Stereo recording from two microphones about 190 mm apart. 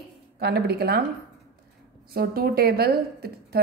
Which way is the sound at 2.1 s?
50° right (ahead or behind).